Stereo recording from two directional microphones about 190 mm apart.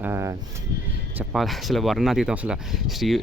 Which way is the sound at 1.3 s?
Centre (ahead or behind).